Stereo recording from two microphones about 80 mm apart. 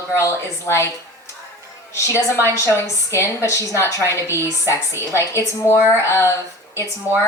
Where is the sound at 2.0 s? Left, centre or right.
Left.